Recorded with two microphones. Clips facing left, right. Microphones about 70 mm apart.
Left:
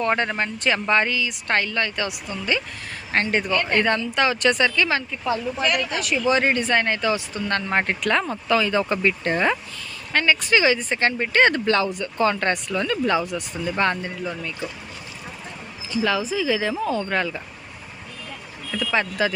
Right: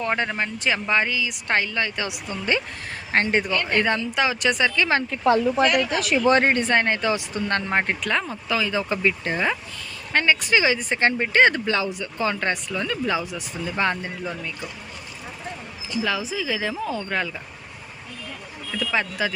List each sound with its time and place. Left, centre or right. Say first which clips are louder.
0.0 s speech: left 2 dB; centre; by 3.4 s right
3.8 s speech: even; centre
5.1 s a woman's voice: right 6 dB; right
6.4 s speech: right 1 dB; right
7.7 s speech: left 4 dB; centre
10.1 s speech: even; right
16.0 s speech: left 3 dB; centre
18.7 s speech: left 2 dB; centre